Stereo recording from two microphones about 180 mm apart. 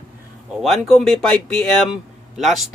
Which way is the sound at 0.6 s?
Centre (ahead or behind).